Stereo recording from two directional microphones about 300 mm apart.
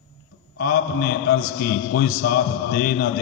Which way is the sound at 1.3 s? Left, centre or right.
Left.